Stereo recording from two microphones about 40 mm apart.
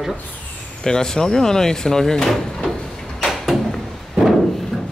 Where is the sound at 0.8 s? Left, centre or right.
Centre.